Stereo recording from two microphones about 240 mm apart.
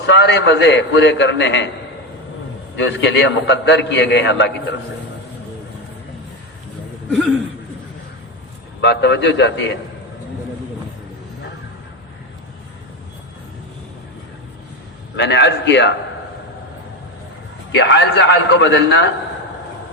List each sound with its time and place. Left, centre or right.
0.0 s a man's voice: left
2.7 s a man's voice: left
8.8 s a man's voice: left
15.1 s a man's voice: left
17.7 s a man's voice: left